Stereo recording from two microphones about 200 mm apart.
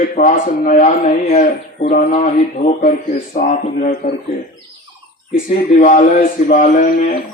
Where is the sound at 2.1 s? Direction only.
35° left (ahead or behind).